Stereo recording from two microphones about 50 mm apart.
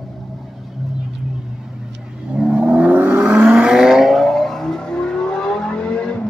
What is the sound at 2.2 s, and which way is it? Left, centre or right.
Vehicle, centre.